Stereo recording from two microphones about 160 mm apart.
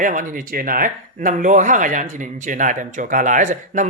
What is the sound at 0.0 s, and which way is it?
Speech, 55° right (ahead or behind).